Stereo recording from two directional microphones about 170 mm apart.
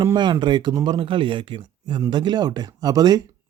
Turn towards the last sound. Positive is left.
turn(degrees=-20)  # may be behind; listen again after turning